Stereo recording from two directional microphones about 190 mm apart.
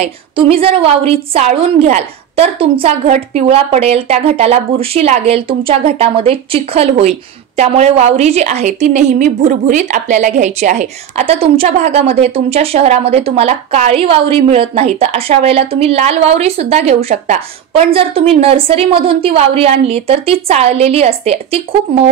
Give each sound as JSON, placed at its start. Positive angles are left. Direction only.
{"t": 0.0, "sound": "speech", "side_deg": -30}